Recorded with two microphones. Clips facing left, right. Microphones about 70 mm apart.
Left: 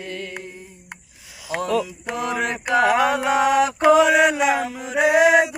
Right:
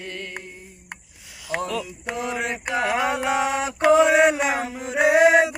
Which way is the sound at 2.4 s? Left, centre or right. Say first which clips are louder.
Left 8 dB; centre.